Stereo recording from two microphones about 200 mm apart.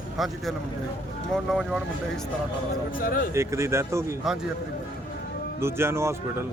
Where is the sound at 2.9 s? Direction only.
45° left (ahead or behind).